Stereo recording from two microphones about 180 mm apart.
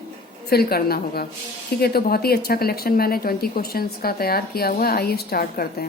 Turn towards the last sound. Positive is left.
turn(degrees=60)  # may be behind; listen again after turning